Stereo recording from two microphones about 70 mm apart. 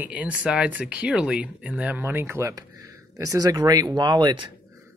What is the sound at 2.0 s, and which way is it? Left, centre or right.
Speech, right.